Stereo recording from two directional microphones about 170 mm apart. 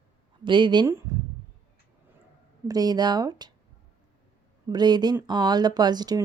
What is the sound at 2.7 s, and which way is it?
Speech, 25° right (ahead or behind).